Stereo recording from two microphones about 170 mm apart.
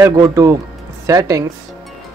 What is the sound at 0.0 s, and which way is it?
Speech, 15° right (ahead or behind).